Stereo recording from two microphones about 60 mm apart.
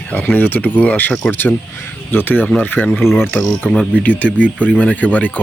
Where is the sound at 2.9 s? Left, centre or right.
Centre.